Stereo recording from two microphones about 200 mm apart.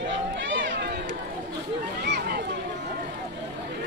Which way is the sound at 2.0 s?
55° right (ahead or behind).